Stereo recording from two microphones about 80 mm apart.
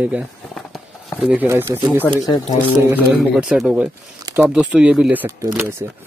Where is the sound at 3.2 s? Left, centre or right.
Centre.